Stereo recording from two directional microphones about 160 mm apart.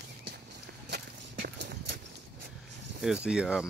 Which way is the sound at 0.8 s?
90° right.